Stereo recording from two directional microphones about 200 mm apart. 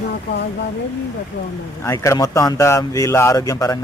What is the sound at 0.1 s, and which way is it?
Speech, 55° left (ahead or behind).